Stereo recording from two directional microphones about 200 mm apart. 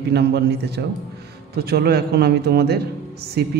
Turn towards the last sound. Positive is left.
turn(degrees=-55)  # may be behind; listen again after turning